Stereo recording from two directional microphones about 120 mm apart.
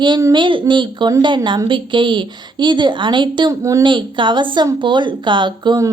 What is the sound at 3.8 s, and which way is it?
A woman's voice, 40° right (ahead or behind).